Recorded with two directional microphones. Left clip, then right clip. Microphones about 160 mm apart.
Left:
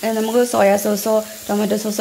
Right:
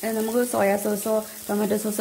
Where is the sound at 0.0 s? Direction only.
5° right (ahead or behind).